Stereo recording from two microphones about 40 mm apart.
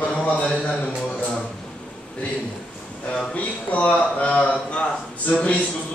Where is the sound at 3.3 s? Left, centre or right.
Left.